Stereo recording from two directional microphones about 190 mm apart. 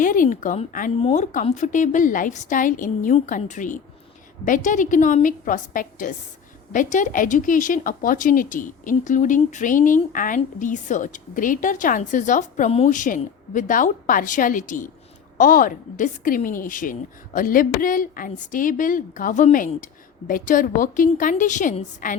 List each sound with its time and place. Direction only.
0.0 s speech: 45° left (ahead or behind)
0.9 s a woman's voice: 35° left (ahead or behind)